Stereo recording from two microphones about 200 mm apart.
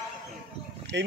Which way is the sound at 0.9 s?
60° right (ahead or behind).